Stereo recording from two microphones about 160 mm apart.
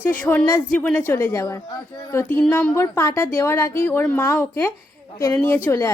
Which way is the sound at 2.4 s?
10° left (ahead or behind).